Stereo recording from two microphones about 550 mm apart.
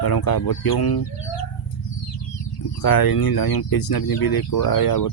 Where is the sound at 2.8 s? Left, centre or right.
Left.